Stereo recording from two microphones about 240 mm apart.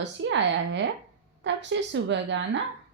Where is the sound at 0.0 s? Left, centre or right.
Right.